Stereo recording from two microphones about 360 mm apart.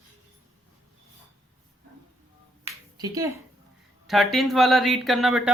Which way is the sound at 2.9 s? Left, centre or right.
Centre.